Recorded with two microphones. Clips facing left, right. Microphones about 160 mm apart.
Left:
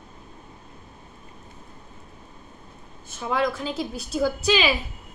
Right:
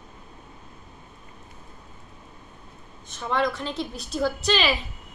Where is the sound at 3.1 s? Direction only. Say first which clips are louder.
Left 1 dB; 5° left (ahead or behind).